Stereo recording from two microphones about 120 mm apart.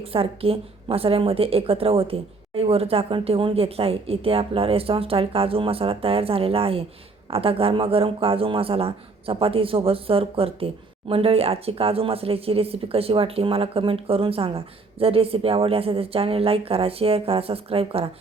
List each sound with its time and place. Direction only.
0.0 s speech: 50° right (ahead or behind)